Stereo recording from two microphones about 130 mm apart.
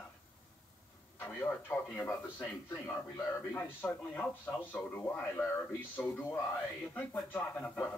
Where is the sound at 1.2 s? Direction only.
15° left (ahead or behind).